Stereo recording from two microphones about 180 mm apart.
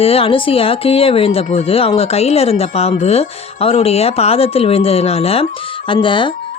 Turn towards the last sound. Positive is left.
turn(degrees=25)  # may be behind; listen again after turning